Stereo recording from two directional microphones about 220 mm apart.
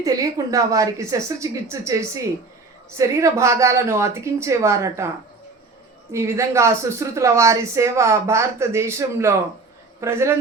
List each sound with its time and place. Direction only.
0.0 s speech: 15° right (ahead or behind)